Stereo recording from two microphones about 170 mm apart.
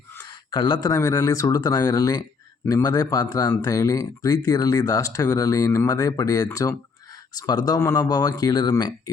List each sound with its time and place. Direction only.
0.3 s speech: 25° left (ahead or behind)